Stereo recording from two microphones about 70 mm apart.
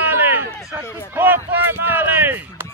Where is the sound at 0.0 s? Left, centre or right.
Right.